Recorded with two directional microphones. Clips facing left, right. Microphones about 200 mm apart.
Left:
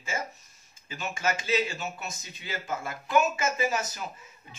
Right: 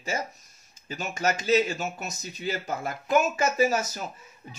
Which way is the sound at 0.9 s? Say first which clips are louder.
Right 3 dB; 40° right (ahead or behind).